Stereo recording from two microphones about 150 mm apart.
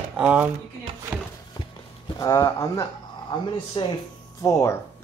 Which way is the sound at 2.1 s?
25° left (ahead or behind).